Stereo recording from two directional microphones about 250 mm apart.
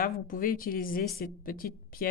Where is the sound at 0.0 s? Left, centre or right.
Left.